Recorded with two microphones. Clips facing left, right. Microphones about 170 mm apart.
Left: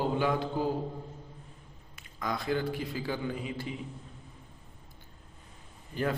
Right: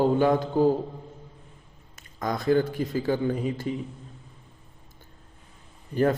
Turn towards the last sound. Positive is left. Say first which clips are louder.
# right 8 dB
turn(degrees=-45)  # may be behind; listen again after turning